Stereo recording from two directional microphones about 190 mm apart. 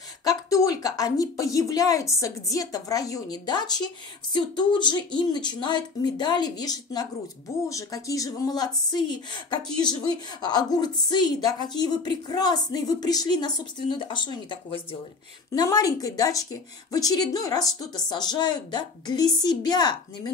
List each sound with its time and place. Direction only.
0.2 s speech: 20° left (ahead or behind)